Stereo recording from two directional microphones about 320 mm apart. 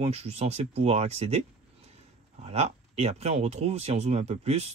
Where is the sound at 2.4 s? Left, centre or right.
Centre.